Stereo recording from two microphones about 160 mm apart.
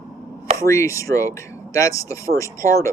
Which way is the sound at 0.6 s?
20° left (ahead or behind).